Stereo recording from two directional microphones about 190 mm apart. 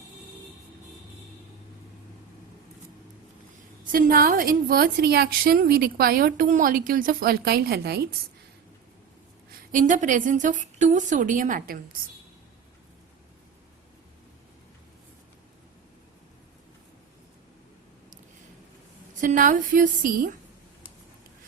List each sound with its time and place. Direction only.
3.9 s a woman's voice: 50° right (ahead or behind)
9.7 s a woman's voice: 40° right (ahead or behind)
19.2 s a woman's voice: 45° right (ahead or behind)